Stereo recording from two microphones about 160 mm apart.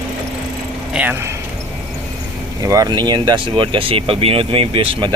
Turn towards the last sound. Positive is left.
turn(degrees=-35)  # may be behind; listen again after turning